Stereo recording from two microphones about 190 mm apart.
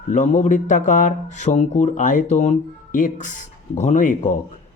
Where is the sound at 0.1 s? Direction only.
40° left (ahead or behind).